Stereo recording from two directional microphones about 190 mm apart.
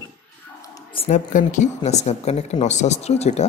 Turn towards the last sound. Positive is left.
turn(degrees=35)  # may be behind; listen again after turning